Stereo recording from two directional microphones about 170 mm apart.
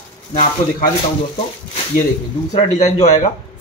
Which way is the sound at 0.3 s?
40° left (ahead or behind).